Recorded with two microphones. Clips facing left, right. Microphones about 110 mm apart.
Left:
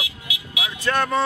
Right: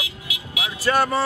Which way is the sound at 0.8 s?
5° right (ahead or behind).